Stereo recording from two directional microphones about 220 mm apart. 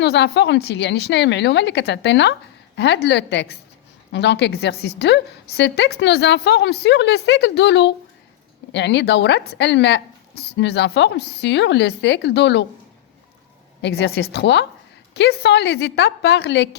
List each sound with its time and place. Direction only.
0.0 s a woman's voice: 50° left (ahead or behind)
13.8 s a woman's voice: 50° left (ahead or behind)